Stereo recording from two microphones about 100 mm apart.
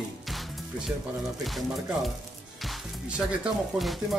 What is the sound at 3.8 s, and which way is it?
Speech, centre (ahead or behind).